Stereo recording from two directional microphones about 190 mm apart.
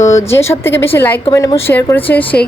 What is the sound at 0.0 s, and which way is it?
A woman's voice, 15° left (ahead or behind).